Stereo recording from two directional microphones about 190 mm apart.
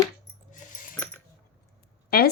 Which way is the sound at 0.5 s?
45° left (ahead or behind).